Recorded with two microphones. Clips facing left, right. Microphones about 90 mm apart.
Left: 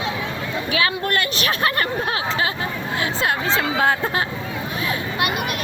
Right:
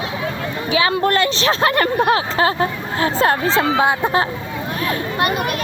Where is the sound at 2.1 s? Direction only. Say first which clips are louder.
Right 6 dB; 35° right (ahead or behind).